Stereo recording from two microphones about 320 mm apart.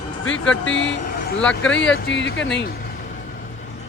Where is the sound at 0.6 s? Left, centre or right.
Left.